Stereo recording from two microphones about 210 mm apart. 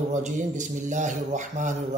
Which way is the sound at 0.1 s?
35° right (ahead or behind).